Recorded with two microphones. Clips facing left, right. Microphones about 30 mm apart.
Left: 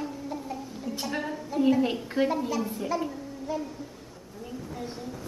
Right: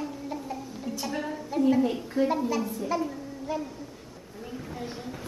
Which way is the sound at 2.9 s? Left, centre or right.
Centre.